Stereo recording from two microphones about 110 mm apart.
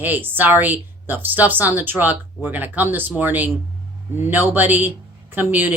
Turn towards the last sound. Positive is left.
turn(degrees=-15)  # may be behind; listen again after turning